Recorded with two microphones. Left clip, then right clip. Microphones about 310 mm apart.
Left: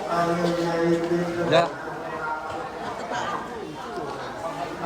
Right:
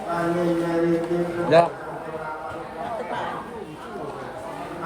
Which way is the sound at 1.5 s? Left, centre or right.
Centre.